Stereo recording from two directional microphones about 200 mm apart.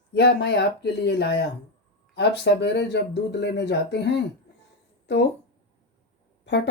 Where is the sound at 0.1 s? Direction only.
55° left (ahead or behind).